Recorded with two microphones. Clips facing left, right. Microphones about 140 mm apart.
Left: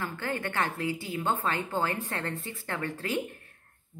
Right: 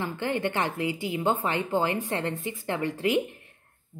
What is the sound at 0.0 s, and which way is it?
A woman's voice, 20° right (ahead or behind).